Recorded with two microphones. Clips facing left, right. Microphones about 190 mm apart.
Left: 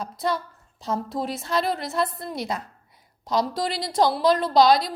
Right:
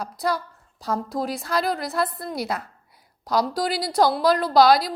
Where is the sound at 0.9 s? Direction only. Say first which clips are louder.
Right 1 dB; centre (ahead or behind).